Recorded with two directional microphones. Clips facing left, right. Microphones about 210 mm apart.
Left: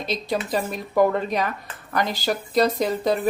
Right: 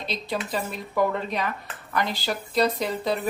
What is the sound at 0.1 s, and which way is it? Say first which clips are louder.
A woman's voice: left 4 dB; 40° left (ahead or behind).